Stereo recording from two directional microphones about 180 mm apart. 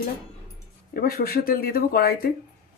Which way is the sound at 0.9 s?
55° left (ahead or behind).